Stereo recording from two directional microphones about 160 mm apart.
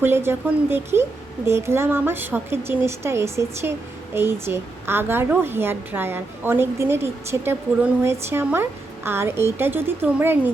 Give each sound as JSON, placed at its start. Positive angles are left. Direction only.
{"t": 0.0, "sound": "a woman's voice", "side_deg": -15}